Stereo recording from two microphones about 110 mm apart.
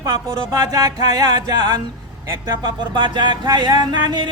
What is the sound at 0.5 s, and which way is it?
Speech, 30° right (ahead or behind).